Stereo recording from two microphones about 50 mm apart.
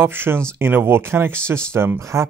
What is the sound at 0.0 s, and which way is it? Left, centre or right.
Speech, right.